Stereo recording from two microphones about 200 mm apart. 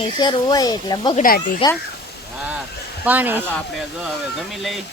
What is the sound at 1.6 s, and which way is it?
Speech, 25° left (ahead or behind).